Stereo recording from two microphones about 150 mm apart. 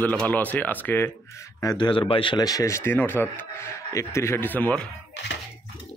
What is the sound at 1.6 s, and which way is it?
Speech, 25° left (ahead or behind).